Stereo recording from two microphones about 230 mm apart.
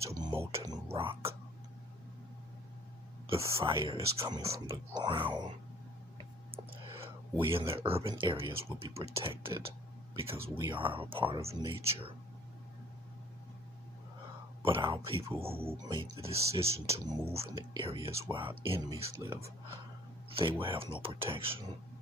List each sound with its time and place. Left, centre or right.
0.0 s speech: centre
0.9 s speech: right
3.3 s speech: centre
6.5 s clicking: right
7.5 s speech: right
10.3 s speech: centre
10.7 s speech: right
14.6 s speech: right
20.6 s speech: right